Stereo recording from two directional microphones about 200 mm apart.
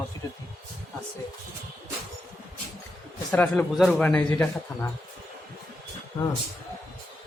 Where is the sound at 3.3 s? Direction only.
5° left (ahead or behind).